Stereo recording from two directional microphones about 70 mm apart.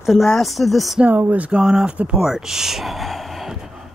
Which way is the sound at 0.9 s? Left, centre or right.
Right.